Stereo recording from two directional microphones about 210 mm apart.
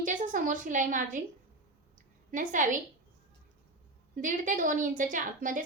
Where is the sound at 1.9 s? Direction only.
40° right (ahead or behind).